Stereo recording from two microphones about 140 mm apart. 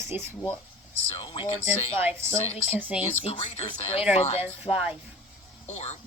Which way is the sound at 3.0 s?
45° left (ahead or behind).